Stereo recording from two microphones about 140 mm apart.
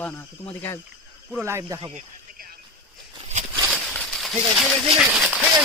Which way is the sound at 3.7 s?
Centre (ahead or behind).